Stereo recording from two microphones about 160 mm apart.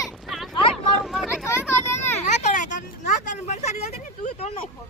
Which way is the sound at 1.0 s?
Centre (ahead or behind).